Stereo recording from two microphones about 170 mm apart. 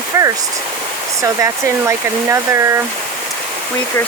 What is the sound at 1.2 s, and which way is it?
Hair dryer, 20° right (ahead or behind).